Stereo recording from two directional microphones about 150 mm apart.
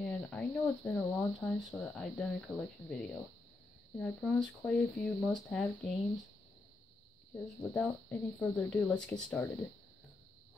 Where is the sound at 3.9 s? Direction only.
10° left (ahead or behind).